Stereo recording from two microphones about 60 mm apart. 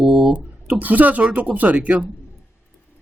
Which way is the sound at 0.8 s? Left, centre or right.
Right.